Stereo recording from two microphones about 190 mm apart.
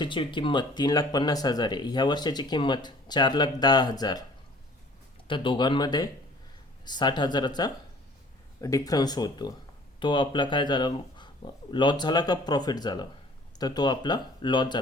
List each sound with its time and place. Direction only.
0.0 s speech: 25° left (ahead or behind)
5.3 s speech: 25° left (ahead or behind)